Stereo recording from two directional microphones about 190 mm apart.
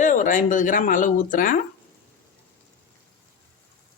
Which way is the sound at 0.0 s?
45° left (ahead or behind).